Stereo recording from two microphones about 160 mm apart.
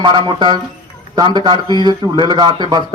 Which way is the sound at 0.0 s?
30° right (ahead or behind).